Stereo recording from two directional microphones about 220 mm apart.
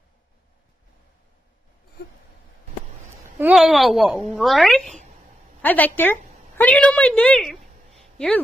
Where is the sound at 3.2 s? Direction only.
10° right (ahead or behind).